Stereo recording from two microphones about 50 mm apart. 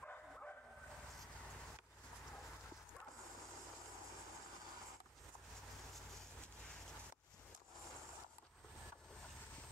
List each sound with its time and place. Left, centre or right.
0.0 s bow-wow: left